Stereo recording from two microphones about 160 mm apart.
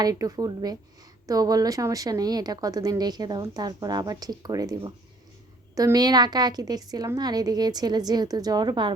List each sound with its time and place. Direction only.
0.0 s a woman's voice: 20° right (ahead or behind)